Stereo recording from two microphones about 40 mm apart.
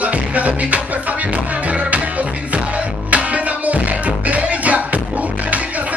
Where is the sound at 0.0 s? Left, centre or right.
Right.